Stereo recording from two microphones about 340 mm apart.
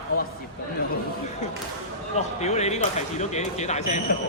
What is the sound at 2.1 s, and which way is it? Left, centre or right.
Speech, centre.